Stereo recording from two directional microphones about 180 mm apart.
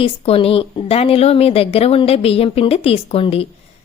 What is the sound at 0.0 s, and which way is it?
Speech, 30° left (ahead or behind).